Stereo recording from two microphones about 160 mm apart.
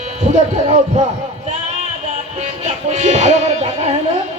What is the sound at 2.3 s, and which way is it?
Speech, 45° right (ahead or behind).